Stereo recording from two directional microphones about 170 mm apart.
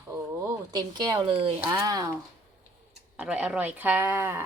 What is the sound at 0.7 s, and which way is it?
Speech, 25° right (ahead or behind).